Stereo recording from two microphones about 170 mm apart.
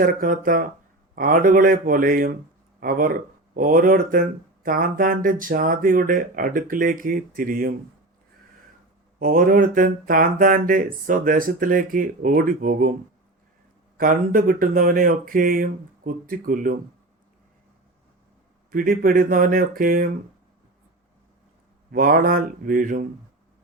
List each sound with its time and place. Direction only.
0.0 s speech: 55° right (ahead or behind)
9.1 s speech: 55° right (ahead or behind)
13.9 s speech: 55° right (ahead or behind)
18.7 s speech: 55° right (ahead or behind)
21.9 s speech: 55° right (ahead or behind)